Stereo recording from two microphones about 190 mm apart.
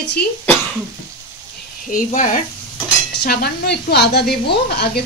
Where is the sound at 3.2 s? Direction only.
55° left (ahead or behind).